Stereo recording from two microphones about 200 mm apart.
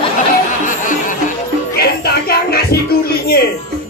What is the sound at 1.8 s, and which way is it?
Music, 50° left (ahead or behind).